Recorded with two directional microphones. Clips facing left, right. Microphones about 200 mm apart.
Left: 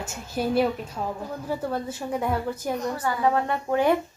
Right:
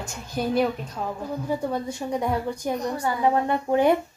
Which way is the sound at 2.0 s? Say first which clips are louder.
Right 1 dB; 10° right (ahead or behind).